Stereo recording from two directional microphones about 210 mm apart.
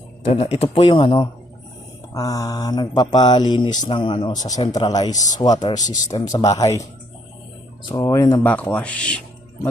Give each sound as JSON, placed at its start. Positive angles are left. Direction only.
{"t": 0.3, "sound": "speech", "side_deg": 30}
{"t": 7.9, "sound": "speech", "side_deg": 15}